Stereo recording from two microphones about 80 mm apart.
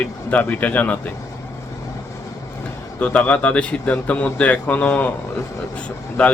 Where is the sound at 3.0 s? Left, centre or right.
Centre.